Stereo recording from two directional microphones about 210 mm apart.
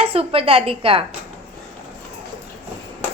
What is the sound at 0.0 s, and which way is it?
A woman's voice, 25° right (ahead or behind).